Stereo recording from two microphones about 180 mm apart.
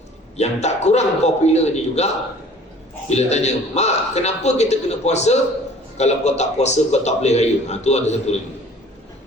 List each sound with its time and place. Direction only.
0.3 s a man's voice: 40° left (ahead or behind)
3.1 s a man's voice: 35° left (ahead or behind)